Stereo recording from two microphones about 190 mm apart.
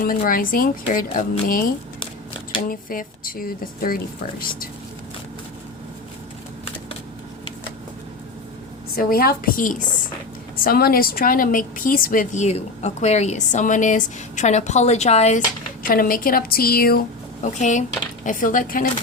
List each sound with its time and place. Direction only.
0.0 s speech: 45° left (ahead or behind)
2.6 s speech: 45° left (ahead or behind)
9.0 s a woman's voice: 50° left (ahead or behind)
15.8 s speech: 50° left (ahead or behind)
17.4 s a woman's voice: 40° left (ahead or behind)